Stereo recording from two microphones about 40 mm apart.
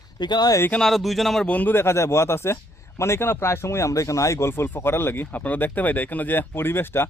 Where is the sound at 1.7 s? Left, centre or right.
Left.